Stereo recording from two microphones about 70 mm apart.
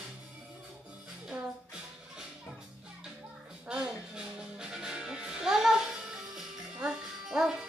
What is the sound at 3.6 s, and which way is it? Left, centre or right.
Music, centre.